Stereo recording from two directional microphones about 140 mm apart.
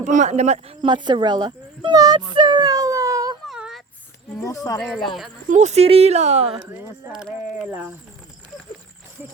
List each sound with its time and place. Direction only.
0.0 s speech: 60° right (ahead or behind); by 3.3 s 25° right (ahead or behind)
3.4 s a sound: centre (ahead or behind)
4.4 s speech: 20° left (ahead or behind)
5.5 s speech: 55° right (ahead or behind)
6.7 s speech: 10° right (ahead or behind)